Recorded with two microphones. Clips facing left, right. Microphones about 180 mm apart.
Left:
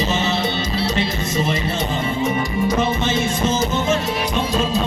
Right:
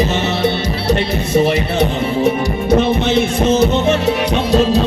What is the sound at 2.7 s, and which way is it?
Music, 65° right (ahead or behind).